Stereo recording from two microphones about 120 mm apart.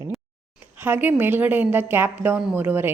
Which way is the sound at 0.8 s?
15° right (ahead or behind).